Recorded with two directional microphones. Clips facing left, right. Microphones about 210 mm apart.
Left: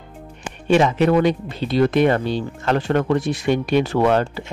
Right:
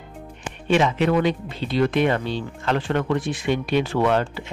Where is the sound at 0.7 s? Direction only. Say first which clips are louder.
Left 4 dB; 40° left (ahead or behind).